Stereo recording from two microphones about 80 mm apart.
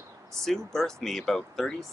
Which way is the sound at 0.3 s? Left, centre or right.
Centre.